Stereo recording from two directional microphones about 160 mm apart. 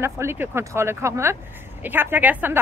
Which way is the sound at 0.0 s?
15° right (ahead or behind).